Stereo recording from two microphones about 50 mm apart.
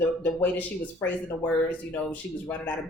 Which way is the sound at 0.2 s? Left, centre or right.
Left.